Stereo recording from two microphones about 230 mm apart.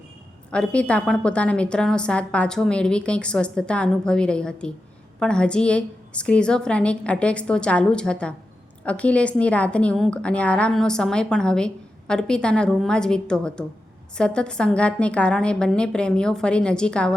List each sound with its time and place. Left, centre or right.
0.5 s a woman's voice: centre